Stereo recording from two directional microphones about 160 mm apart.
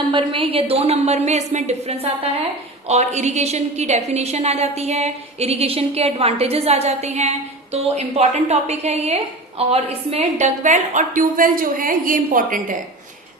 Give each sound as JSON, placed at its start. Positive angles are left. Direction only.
{"t": 0.1, "sound": "a woman's voice", "side_deg": -35}